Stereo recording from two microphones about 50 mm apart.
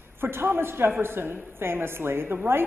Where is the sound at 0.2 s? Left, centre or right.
Right.